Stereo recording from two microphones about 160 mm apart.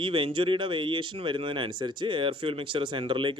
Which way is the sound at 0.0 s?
30° right (ahead or behind).